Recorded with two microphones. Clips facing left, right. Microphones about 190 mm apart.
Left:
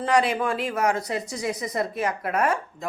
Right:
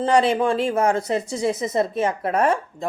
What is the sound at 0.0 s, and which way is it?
Speech, 30° right (ahead or behind).